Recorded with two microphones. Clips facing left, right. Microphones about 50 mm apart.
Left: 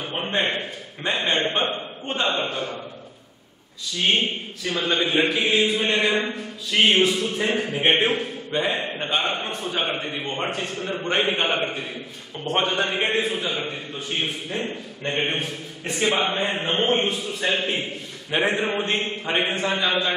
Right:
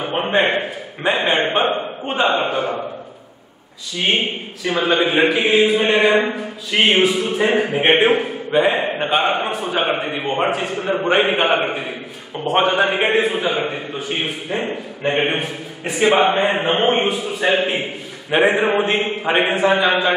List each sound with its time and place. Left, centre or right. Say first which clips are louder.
0.0 s a man's voice: right 7 dB; right
3.9 s a man's voice: right 3 dB; centre
8.8 s a man's voice: right 7 dB; right